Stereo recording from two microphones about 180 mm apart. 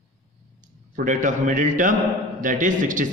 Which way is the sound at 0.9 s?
45° right (ahead or behind).